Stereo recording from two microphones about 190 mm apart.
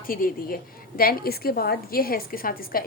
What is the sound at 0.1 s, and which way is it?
A woman's voice, 50° left (ahead or behind).